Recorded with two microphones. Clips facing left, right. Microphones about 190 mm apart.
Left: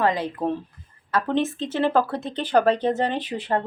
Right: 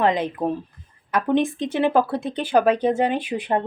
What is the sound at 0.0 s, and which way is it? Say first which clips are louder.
Speech: right 2 dB; 20° right (ahead or behind).